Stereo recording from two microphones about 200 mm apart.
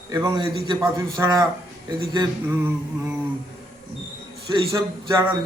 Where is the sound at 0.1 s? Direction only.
15° right (ahead or behind).